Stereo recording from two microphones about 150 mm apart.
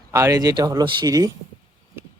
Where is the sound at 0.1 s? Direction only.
20° right (ahead or behind).